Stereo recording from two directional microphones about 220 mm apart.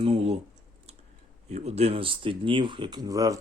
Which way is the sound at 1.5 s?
30° right (ahead or behind).